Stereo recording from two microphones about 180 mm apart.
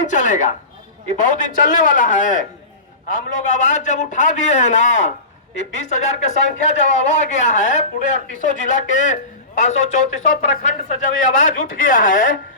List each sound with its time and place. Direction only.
0.1 s a man's voice: 45° left (ahead or behind)